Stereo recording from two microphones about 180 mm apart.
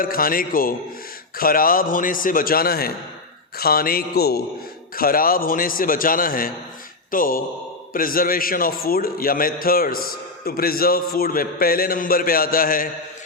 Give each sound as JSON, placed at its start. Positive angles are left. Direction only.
{"t": 0.0, "sound": "a man's voice", "side_deg": 55}